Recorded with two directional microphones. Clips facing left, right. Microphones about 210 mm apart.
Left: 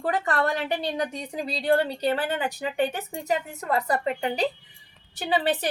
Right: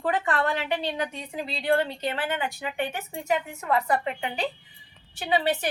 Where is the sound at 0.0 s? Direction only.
40° left (ahead or behind).